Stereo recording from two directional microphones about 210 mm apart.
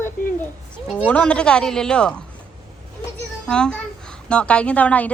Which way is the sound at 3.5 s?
5° left (ahead or behind).